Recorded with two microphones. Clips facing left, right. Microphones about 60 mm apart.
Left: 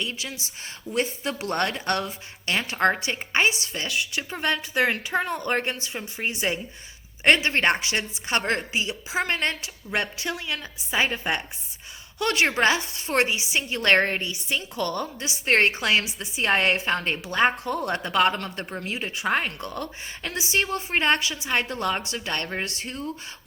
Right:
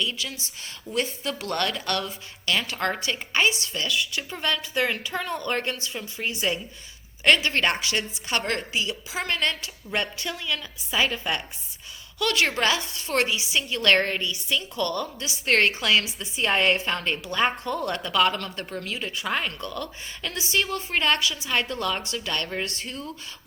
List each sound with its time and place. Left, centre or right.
0.0 s a woman's voice: left
16.4 s a woman's voice: left